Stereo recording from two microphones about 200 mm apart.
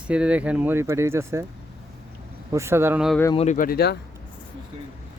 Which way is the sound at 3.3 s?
35° left (ahead or behind).